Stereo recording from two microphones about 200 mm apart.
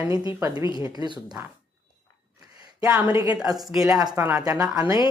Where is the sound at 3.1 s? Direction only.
15° right (ahead or behind).